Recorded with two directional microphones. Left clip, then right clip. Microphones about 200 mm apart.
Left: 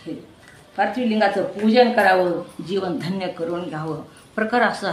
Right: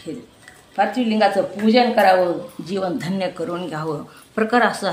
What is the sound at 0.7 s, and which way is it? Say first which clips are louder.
Speech: right 2 dB; 35° right (ahead or behind).